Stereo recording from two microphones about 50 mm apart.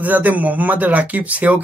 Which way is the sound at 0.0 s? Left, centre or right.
Right.